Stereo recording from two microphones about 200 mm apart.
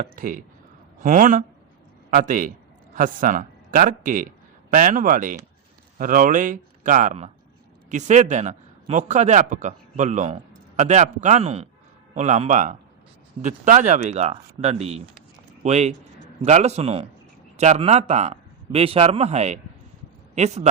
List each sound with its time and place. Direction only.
0.0 s a man's voice: 40° right (ahead or behind)